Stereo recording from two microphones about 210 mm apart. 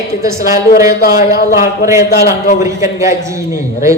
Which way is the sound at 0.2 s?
15° right (ahead or behind).